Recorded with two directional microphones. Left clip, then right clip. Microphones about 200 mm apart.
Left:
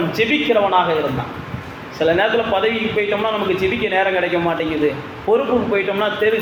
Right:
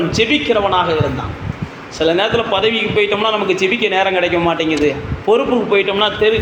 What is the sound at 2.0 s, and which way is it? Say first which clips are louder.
A man's voice: right 1 dB; 30° right (ahead or behind).